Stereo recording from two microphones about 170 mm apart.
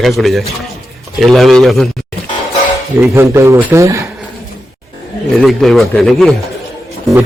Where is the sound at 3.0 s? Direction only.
15° right (ahead or behind).